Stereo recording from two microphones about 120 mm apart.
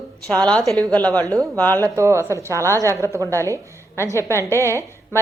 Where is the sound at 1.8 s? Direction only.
25° right (ahead or behind).